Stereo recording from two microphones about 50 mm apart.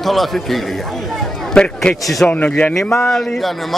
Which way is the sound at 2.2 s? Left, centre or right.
Left.